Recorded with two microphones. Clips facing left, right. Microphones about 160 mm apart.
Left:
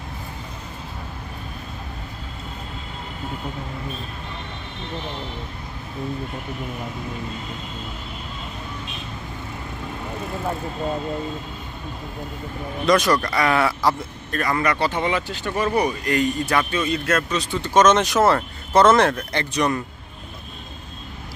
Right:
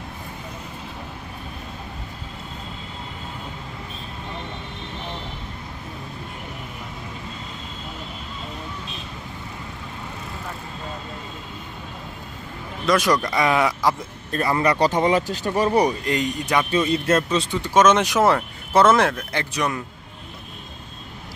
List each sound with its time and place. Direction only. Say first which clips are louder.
12.9 s speech: left 1 dB; 10° right (ahead or behind)
13.2 s speech: even; 20° right (ahead or behind)
14.3 s speech: right 2 dB; 30° right (ahead or behind)
16.1 s speech: left 2 dB; 20° right (ahead or behind)
16.7 s speech: right 3 dB; 30° right (ahead or behind)
17.6 s speech: left 1 dB; 10° right (ahead or behind)